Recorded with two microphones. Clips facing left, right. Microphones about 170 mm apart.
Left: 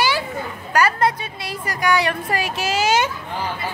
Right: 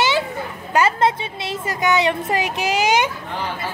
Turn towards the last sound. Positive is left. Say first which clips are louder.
# right 1 dB
turn(degrees=-15)  # may be behind; listen again after turning